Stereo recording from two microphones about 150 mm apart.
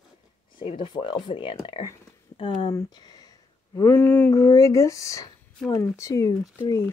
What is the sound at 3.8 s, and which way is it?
Speech, 10° left (ahead or behind).